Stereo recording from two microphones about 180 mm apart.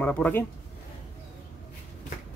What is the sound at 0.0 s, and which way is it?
Speech, 10° left (ahead or behind).